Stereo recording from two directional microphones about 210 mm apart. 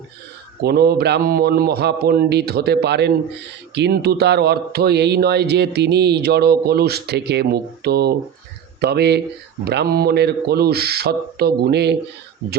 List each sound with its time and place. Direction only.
0.6 s speech: 50° right (ahead or behind)